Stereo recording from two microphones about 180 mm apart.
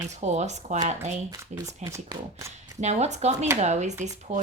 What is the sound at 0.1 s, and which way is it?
Speech, 40° right (ahead or behind).